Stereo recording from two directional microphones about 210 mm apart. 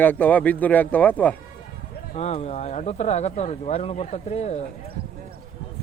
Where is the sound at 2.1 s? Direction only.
30° left (ahead or behind).